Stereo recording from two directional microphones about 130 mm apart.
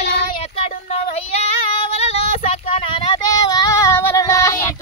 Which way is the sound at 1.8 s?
50° left (ahead or behind).